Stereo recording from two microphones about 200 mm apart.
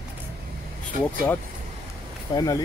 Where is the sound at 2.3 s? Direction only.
20° left (ahead or behind).